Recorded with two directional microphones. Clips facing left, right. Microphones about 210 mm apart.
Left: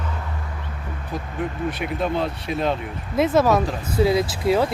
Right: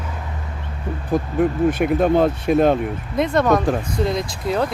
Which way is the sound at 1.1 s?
50° right (ahead or behind).